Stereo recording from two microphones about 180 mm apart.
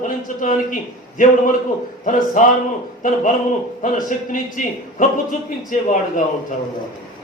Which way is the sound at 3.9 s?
50° left (ahead or behind).